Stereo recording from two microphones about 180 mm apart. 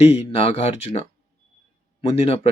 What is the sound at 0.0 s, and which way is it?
Speech, 35° left (ahead or behind).